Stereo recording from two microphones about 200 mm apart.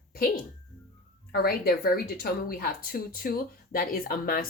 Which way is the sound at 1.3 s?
50° left (ahead or behind).